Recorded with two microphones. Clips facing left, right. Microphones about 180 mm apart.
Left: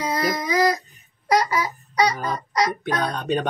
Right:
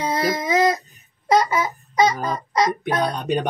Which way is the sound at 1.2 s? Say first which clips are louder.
Right 2 dB; 25° right (ahead or behind).